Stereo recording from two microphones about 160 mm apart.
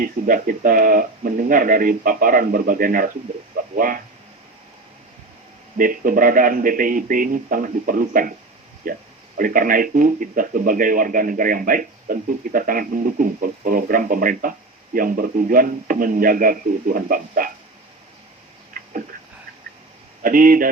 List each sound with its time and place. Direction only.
0.0 s speech: 60° right (ahead or behind)
5.7 s speech: 60° right (ahead or behind)
18.8 s a sound: 60° right (ahead or behind)
20.2 s speech: 60° right (ahead or behind)